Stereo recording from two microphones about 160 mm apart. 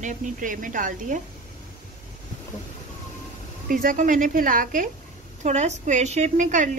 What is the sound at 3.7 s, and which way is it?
Speech, 60° right (ahead or behind).